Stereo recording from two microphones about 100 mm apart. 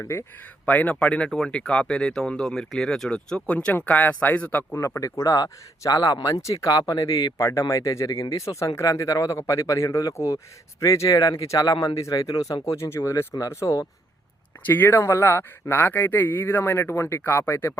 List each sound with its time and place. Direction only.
0.0 s speech: 25° left (ahead or behind)
0.6 s speech: 15° left (ahead or behind)
4.7 s speech: 30° left (ahead or behind)
12.0 s speech: 30° left (ahead or behind)